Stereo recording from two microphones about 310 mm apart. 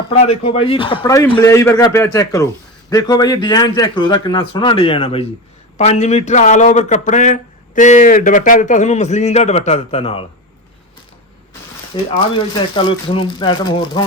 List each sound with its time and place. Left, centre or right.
0.1 s a man's voice: centre
11.9 s a man's voice: centre